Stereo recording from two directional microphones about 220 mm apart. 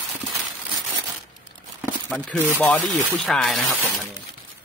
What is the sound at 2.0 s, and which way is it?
Speech, 5° left (ahead or behind).